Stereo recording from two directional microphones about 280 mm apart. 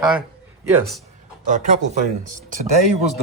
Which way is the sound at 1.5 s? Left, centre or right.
Right.